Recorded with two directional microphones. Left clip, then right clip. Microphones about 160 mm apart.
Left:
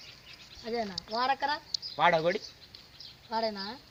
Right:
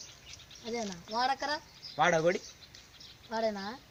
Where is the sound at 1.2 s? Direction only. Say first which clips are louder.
Left 3 dB; 90° right.